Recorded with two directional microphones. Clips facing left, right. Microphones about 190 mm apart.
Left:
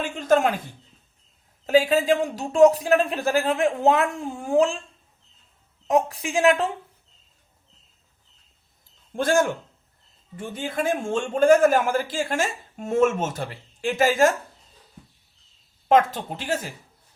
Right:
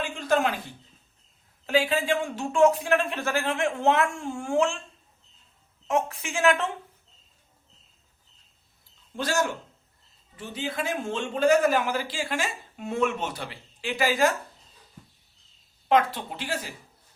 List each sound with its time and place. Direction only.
0.0 s a man's voice: 45° left (ahead or behind)
1.6 s a woman's voice: 40° left (ahead or behind)
5.9 s a woman's voice: 35° left (ahead or behind)
9.1 s a man's voice: 50° left (ahead or behind)
15.9 s a man's voice: 45° left (ahead or behind)